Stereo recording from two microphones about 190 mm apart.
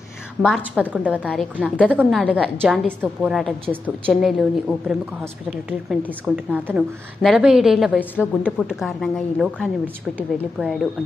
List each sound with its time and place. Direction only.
0.4 s a woman's voice: 5° right (ahead or behind)